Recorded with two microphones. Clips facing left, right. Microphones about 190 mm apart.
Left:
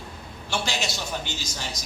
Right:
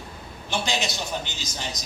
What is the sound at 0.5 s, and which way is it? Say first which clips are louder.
Speech: right 1 dB; 20° right (ahead or behind).